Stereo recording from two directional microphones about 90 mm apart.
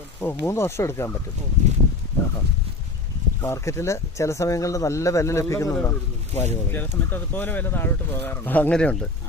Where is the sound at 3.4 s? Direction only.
30° left (ahead or behind).